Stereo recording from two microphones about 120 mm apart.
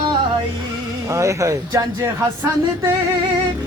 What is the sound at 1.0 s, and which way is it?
Speech, 25° right (ahead or behind).